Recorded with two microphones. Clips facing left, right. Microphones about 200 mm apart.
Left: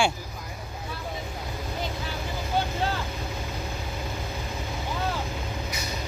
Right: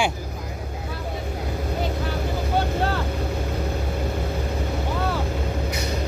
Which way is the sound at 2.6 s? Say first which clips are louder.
Right 3 dB; 60° right (ahead or behind).